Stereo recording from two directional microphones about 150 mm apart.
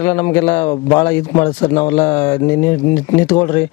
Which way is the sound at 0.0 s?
15° left (ahead or behind).